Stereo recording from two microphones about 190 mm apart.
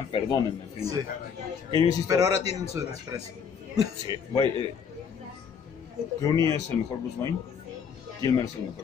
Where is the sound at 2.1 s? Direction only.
15° right (ahead or behind).